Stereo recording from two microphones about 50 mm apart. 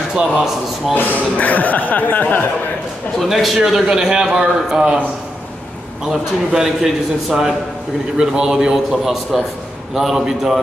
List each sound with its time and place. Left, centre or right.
0.1 s a man's voice: centre
1.1 s speech: left
3.2 s a man's voice: centre
6.0 s a man's voice: centre